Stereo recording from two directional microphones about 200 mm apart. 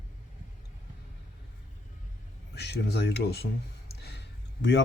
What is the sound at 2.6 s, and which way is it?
Speech, 55° left (ahead or behind).